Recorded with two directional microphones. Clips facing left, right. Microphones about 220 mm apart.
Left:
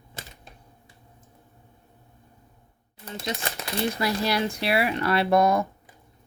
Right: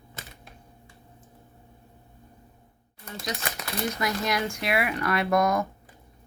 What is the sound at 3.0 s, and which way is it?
Speech, 25° left (ahead or behind).